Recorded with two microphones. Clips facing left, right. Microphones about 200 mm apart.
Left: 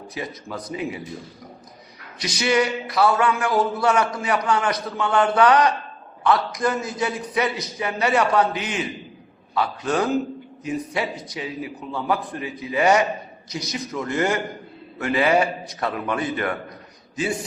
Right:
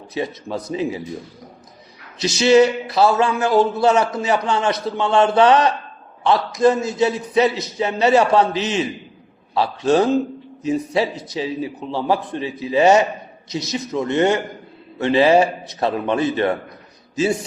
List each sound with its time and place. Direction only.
0.1 s a man's voice: 25° right (ahead or behind)
2.2 s a man's voice: 25° right (ahead or behind)